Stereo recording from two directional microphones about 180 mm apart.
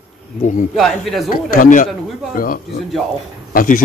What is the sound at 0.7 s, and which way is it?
Speech, centre (ahead or behind).